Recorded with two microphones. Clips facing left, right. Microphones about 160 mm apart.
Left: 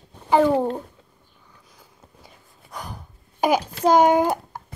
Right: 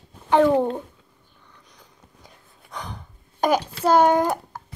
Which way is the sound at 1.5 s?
5° left (ahead or behind).